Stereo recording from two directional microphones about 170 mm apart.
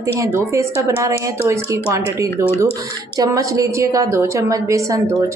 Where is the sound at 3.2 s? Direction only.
20° right (ahead or behind).